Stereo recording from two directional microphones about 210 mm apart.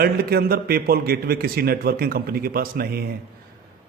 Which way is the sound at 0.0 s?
45° right (ahead or behind).